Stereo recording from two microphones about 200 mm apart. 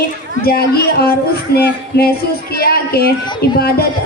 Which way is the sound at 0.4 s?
50° left (ahead or behind).